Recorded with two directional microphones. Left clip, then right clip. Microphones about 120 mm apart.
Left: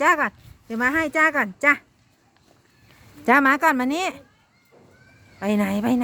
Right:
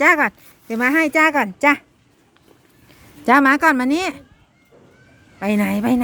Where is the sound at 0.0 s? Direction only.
35° right (ahead or behind).